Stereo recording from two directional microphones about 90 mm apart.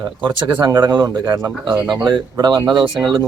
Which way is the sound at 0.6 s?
45° right (ahead or behind).